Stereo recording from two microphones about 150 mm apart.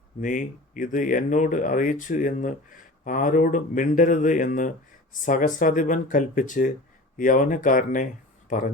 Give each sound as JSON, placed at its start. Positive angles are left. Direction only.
{"t": 0.2, "sound": "speech", "side_deg": 60}